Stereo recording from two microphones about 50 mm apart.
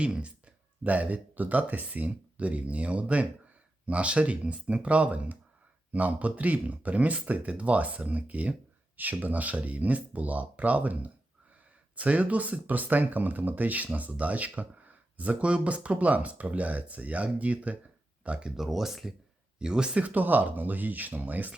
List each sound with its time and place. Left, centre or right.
0.0 s speech: right
18.2 s a sound: right
18.4 s speech: centre; by 21.5 s right